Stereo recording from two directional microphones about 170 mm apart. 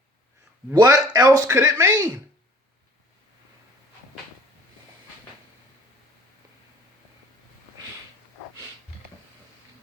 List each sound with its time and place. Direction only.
0.8 s speech: 20° right (ahead or behind)